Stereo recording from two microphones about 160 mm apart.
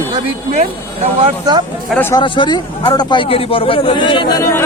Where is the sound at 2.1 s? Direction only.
30° left (ahead or behind).